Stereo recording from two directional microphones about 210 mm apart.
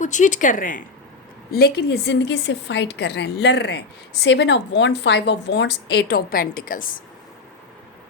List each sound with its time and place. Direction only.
0.0 s speech: 35° left (ahead or behind)
1.5 s a woman's voice: 50° left (ahead or behind)